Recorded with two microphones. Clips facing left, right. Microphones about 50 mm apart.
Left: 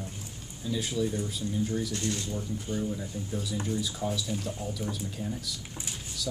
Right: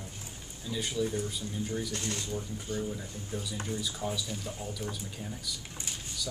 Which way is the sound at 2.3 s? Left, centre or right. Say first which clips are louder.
Left 2 dB; centre.